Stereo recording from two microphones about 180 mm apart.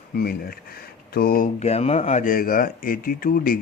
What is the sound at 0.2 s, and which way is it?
Speech, 55° left (ahead or behind).